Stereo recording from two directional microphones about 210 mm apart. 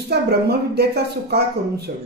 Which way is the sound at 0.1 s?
50° right (ahead or behind).